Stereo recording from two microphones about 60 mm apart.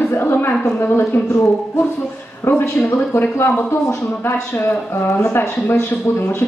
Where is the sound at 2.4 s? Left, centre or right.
Left.